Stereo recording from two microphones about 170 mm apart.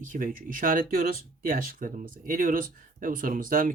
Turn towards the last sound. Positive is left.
turn(degrees=-55)  # may be behind; listen again after turning